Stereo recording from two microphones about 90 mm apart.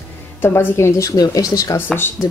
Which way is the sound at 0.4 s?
30° left (ahead or behind).